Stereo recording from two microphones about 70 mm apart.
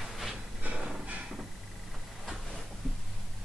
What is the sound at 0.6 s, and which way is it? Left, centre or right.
Music, right.